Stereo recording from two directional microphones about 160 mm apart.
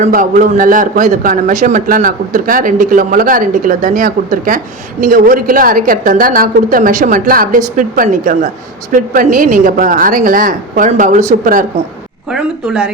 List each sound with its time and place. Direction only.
0.0 s a man's voice: 55° right (ahead or behind)
12.3 s speech: 5° right (ahead or behind)